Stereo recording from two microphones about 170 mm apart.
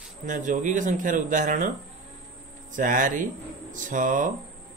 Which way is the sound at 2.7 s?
50° right (ahead or behind).